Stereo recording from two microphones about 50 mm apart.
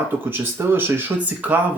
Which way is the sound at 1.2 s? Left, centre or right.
Right.